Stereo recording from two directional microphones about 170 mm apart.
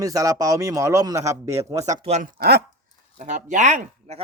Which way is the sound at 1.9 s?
45° right (ahead or behind).